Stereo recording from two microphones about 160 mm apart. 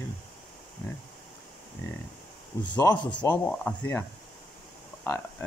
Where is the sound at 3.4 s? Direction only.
10° left (ahead or behind).